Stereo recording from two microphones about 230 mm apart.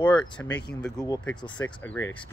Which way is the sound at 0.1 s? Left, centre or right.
Centre.